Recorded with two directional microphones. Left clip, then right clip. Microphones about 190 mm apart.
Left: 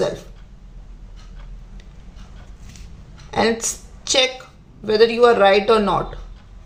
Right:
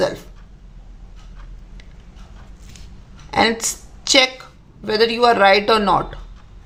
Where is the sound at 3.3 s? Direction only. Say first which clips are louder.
Right 2 dB; 35° right (ahead or behind).